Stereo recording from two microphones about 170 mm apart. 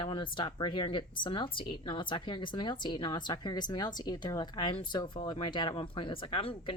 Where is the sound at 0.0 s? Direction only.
30° left (ahead or behind).